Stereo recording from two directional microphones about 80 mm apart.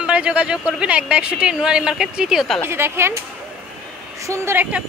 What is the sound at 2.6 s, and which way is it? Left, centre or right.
Speech, right.